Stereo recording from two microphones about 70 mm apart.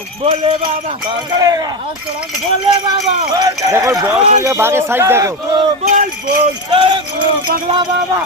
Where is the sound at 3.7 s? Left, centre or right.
Right.